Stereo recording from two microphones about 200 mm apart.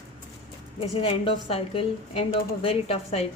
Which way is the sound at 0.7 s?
30° left (ahead or behind).